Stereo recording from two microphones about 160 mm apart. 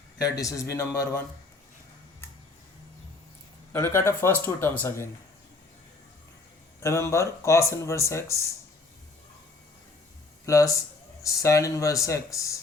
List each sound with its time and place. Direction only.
0.2 s speech: 20° left (ahead or behind)
3.7 s speech: 15° left (ahead or behind)
6.7 s speech: 15° left (ahead or behind)
10.4 s speech: 20° left (ahead or behind)